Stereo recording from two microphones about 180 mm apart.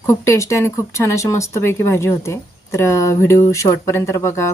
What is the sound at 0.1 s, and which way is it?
Speech, 15° left (ahead or behind).